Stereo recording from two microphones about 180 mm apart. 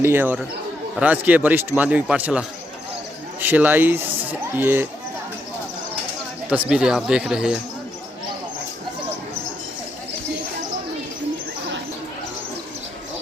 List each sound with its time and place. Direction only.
0.0 s speech: 10° right (ahead or behind)
3.4 s speech: 10° right (ahead or behind)
6.5 s speech: 5° right (ahead or behind)